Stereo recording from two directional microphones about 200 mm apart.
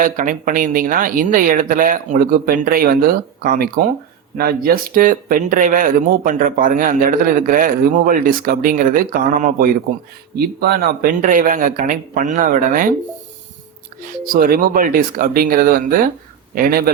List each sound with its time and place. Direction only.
0.0 s speech: 40° right (ahead or behind)
14.0 s speech: 45° right (ahead or behind)